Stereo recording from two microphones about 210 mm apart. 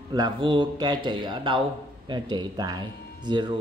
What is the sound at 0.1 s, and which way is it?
Speech, 20° right (ahead or behind).